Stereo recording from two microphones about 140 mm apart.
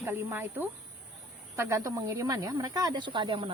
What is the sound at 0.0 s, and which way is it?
Speech, 15° right (ahead or behind).